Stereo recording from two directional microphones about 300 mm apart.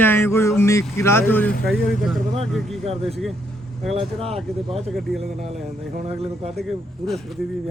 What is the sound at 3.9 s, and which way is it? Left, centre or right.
Speech, centre.